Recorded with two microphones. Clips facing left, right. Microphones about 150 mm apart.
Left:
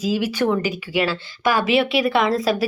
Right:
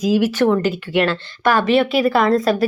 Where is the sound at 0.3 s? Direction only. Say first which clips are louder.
Right 4 dB; 10° left (ahead or behind).